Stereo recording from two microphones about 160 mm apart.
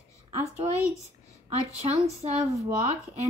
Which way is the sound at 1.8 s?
40° right (ahead or behind).